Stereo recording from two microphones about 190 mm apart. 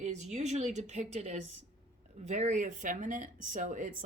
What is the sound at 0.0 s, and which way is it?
Speech, 35° right (ahead or behind).